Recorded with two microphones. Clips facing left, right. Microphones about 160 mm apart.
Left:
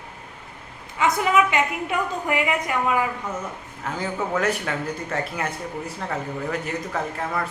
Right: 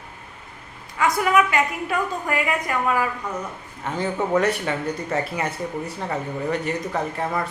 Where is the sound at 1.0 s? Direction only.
20° left (ahead or behind).